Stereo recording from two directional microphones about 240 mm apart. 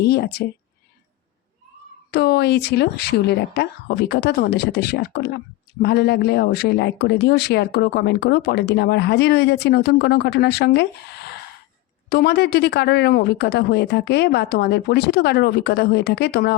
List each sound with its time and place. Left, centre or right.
0.0 s speech: left
2.0 s speech: left